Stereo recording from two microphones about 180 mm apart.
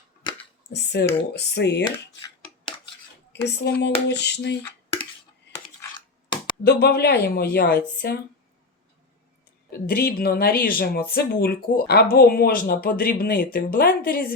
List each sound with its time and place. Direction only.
0.7 s speech: 70° left (ahead or behind)
1.8 s a sound: 20° left (ahead or behind)
3.4 s speech: 70° left (ahead or behind)
6.7 s speech: 65° left (ahead or behind)
9.9 s speech: 55° left (ahead or behind)